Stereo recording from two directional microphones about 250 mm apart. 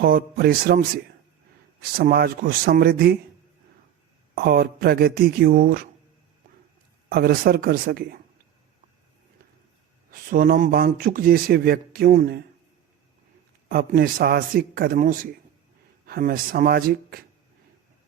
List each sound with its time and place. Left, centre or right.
0.0 s speech: right
4.4 s speech: right
7.1 s speech: right
10.1 s speech: right
13.7 s speech: right